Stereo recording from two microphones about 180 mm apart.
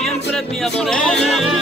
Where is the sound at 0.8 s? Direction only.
Centre (ahead or behind).